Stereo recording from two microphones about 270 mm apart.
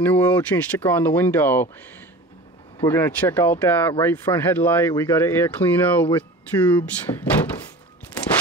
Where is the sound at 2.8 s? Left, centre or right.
Centre.